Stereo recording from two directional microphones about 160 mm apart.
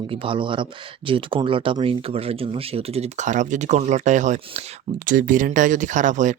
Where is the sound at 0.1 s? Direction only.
35° right (ahead or behind).